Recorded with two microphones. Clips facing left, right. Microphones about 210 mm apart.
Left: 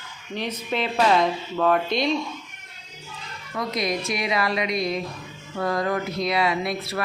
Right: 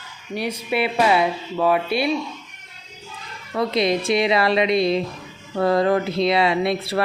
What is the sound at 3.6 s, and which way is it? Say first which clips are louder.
A woman's voice: right 6 dB; 25° right (ahead or behind).